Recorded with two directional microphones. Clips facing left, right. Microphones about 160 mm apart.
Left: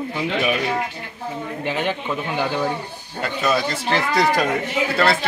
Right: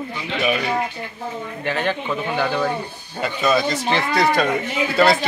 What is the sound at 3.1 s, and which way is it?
Speech, 5° right (ahead or behind).